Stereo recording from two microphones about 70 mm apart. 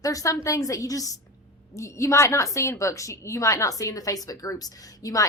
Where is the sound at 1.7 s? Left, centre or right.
Left.